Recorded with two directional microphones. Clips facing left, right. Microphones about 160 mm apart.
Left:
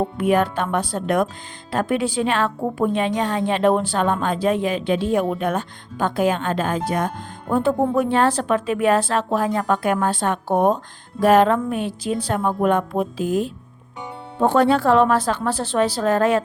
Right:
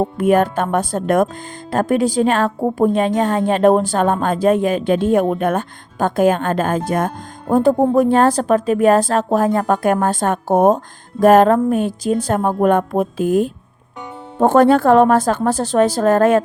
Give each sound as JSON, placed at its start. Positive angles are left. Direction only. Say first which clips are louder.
{"t": 0.2, "sound": "a woman's voice", "louder": "right 4 dB", "side_deg": -45}